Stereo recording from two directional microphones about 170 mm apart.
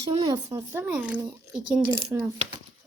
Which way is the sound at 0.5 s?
15° right (ahead or behind).